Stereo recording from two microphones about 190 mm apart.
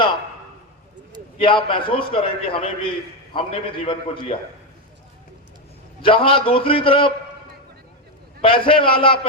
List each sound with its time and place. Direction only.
1.4 s a man's voice: 25° left (ahead or behind)
6.0 s a man's voice: 25° left (ahead or behind)
8.4 s a man's voice: 30° left (ahead or behind)